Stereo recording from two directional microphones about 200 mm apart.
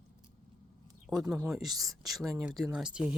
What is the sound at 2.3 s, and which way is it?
Speech, 10° right (ahead or behind).